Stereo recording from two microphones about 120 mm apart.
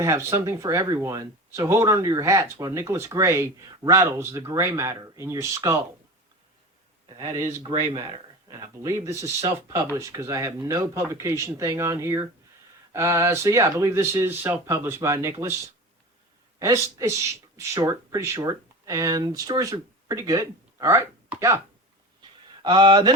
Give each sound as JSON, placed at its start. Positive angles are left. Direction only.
{"t": 0.0, "sound": "speech", "side_deg": -25}
{"t": 8.4, "sound": "speech", "side_deg": -30}
{"t": 22.6, "sound": "speech", "side_deg": -40}